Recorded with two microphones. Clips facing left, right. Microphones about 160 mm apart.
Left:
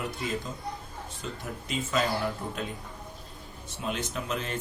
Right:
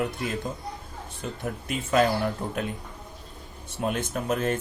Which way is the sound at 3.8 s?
50° right (ahead or behind).